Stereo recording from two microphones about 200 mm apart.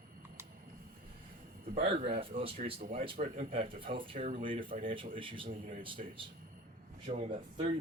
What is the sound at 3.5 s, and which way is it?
Speech, 25° right (ahead or behind).